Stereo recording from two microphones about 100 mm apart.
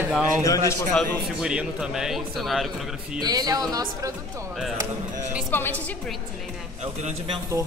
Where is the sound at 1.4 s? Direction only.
10° right (ahead or behind).